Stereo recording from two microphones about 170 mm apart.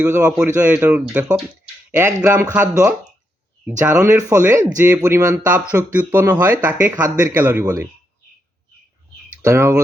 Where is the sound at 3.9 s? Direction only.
10° right (ahead or behind).